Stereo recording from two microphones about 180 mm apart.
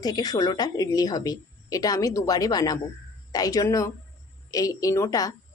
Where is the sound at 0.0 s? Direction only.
20° left (ahead or behind).